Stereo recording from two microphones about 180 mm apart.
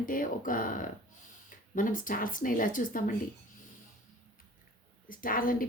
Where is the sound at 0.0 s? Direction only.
50° left (ahead or behind).